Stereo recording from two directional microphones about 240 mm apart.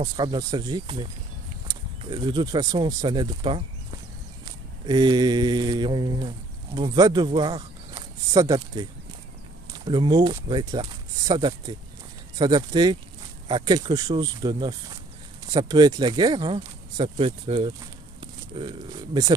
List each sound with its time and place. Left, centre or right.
0.0 s speech: centre
4.8 s a sound: centre
9.8 s speech: centre